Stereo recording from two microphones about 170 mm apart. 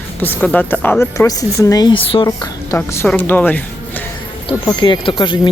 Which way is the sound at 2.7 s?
15° left (ahead or behind).